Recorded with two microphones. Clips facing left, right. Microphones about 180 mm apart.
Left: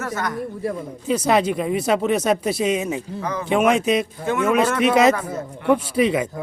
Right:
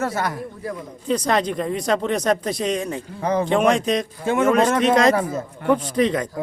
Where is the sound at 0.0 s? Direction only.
30° right (ahead or behind).